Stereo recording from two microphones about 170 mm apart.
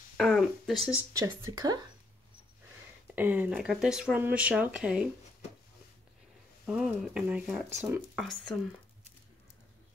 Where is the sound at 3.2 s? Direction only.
10° right (ahead or behind).